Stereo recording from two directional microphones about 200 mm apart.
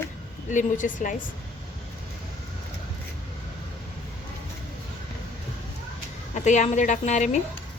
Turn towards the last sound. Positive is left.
turn(degrees=35)  # may be behind; listen again after turning